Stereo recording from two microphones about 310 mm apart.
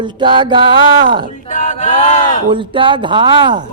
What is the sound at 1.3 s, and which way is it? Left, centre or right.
A woman's voice, left.